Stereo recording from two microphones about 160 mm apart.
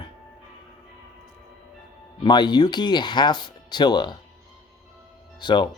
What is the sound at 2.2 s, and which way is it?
Speech, 25° left (ahead or behind).